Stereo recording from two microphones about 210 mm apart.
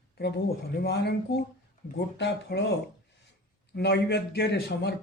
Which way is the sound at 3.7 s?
50° left (ahead or behind).